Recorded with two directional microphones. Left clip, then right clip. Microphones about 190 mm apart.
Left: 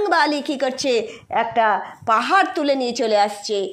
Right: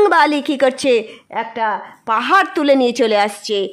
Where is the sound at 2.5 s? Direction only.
45° right (ahead or behind).